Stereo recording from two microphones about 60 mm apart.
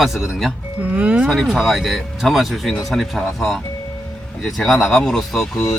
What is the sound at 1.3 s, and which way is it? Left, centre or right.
Speech, centre.